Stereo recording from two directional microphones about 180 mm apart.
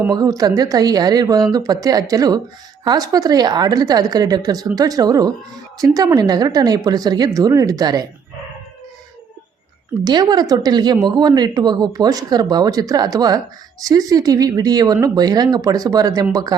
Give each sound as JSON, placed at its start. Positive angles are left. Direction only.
{"t": 0.0, "sound": "a woman's voice", "side_deg": -20}
{"t": 10.0, "sound": "a woman's voice", "side_deg": -25}